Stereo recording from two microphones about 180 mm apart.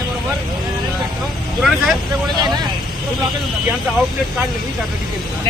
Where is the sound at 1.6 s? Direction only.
Centre (ahead or behind).